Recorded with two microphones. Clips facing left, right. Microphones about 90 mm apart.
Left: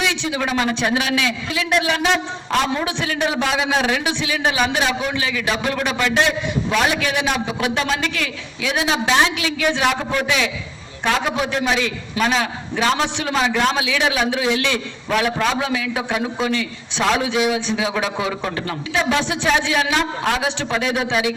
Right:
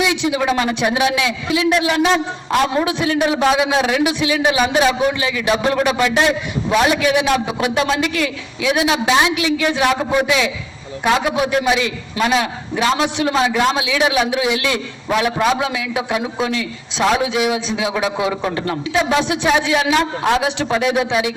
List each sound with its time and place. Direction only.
0.0 s a man's voice: 10° right (ahead or behind)
5.5 s speech: 20° right (ahead or behind)
5.9 s a man's voice: 10° right (ahead or behind)
18.5 s a man's voice: 30° right (ahead or behind)
18.9 s a man's voice: 15° right (ahead or behind)